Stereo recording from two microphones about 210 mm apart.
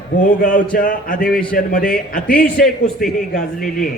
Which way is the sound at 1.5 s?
40° left (ahead or behind).